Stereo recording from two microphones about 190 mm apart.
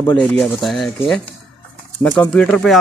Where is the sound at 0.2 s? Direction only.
Centre (ahead or behind).